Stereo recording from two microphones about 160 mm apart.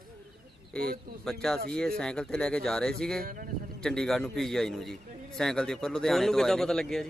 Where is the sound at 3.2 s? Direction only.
60° right (ahead or behind).